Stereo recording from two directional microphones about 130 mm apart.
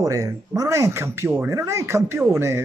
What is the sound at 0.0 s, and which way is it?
Speech, 25° right (ahead or behind).